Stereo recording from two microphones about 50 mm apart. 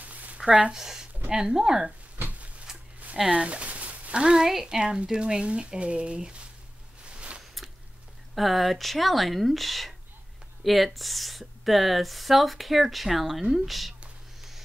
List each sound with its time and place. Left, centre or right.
0.0 s a sound: right
0.4 s speech: right
0.7 s speech: centre
3.2 s speech: right
7.2 s biting: right
8.4 s speech: centre